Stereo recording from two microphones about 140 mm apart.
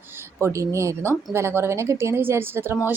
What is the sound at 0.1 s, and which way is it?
A woman's voice, 20° right (ahead or behind).